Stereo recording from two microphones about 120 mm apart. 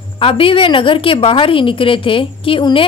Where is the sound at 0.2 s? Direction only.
50° left (ahead or behind).